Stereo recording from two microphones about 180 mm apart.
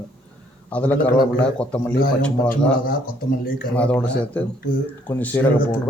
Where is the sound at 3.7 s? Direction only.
5° left (ahead or behind).